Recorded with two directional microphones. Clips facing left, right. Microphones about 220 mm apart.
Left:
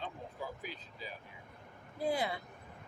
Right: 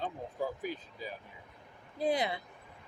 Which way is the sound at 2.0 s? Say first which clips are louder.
Right 3 dB; 20° right (ahead or behind).